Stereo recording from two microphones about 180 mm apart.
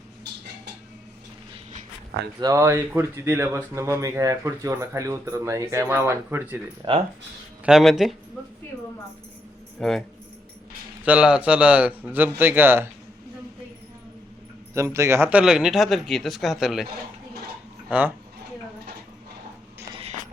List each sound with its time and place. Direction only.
2.4 s speech: 15° right (ahead or behind)
6.8 s speech: 25° right (ahead or behind)
7.6 s speech: centre (ahead or behind)
9.8 s speech: 5° left (ahead or behind)
11.0 s speech: 5° right (ahead or behind)
14.7 s speech: 15° right (ahead or behind)
17.8 s speech: 10° right (ahead or behind)
19.9 s a sound: 35° right (ahead or behind)